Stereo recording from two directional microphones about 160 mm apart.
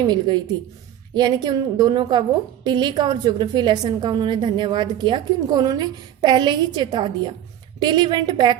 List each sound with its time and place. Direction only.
0.0 s a woman's voice: 25° right (ahead or behind)